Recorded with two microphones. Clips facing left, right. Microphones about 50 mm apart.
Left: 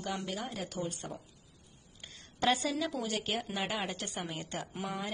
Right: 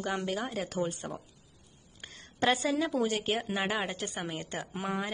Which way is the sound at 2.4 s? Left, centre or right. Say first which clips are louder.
Right 3 dB; right.